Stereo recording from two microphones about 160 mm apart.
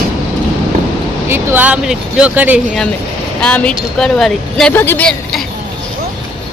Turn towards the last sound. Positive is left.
turn(degrees=5)  # may be behind; listen again after turning